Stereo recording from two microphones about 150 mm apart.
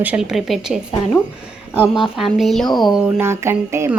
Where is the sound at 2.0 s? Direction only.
Centre (ahead or behind).